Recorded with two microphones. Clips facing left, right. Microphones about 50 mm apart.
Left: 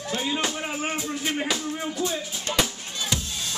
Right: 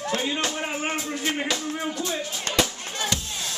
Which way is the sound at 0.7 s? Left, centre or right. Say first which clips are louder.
Right 1 dB; centre.